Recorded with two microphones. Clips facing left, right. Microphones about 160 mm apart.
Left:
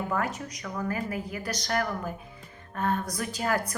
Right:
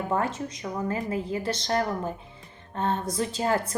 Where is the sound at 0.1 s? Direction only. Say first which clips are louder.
Right 3 dB; 30° right (ahead or behind).